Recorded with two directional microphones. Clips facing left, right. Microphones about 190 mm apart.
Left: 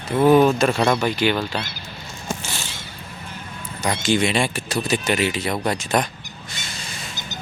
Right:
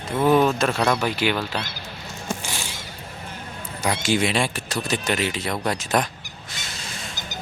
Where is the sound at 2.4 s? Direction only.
15° right (ahead or behind).